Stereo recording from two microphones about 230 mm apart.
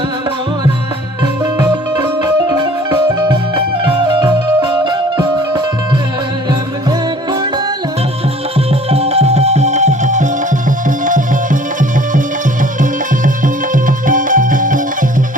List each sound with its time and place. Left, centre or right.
1.5 s music: centre
8.9 s music: right
14.1 s music: right